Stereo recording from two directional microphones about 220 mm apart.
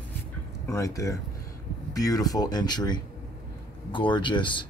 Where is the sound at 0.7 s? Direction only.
15° left (ahead or behind).